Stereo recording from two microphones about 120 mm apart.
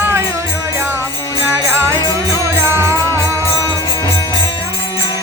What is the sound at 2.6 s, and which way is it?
Music, 25° right (ahead or behind).